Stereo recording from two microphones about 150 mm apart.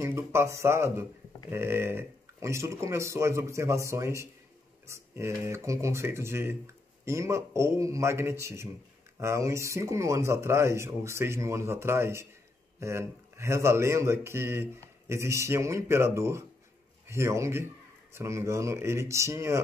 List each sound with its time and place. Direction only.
0.0 s speech: 20° right (ahead or behind)